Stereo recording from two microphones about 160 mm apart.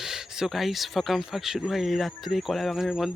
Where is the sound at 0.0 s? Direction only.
5° right (ahead or behind).